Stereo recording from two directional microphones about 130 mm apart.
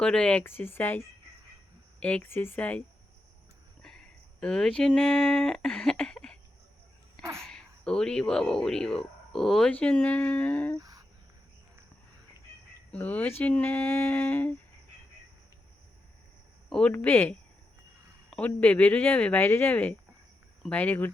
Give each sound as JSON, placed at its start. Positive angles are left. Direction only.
{"t": 0.0, "sound": "speech", "side_deg": 5}
{"t": 3.8, "sound": "speech", "side_deg": 5}
{"t": 7.4, "sound": "speech", "side_deg": 5}
{"t": 10.8, "sound": "a sound", "side_deg": -25}
{"t": 12.9, "sound": "speech", "side_deg": 10}
{"t": 16.6, "sound": "speech", "side_deg": 5}
{"t": 16.9, "sound": "speech", "side_deg": 15}